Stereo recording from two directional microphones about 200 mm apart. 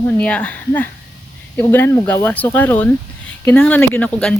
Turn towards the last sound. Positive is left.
turn(degrees=5)  # may be behind; listen again after turning